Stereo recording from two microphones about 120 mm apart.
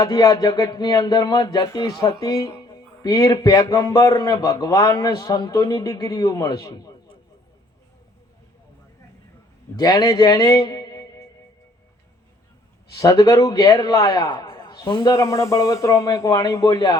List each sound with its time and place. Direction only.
0.0 s music: 30° left (ahead or behind)
9.7 s a man's voice: 30° left (ahead or behind)
13.0 s music: 30° left (ahead or behind)
15.1 s speech: 25° left (ahead or behind)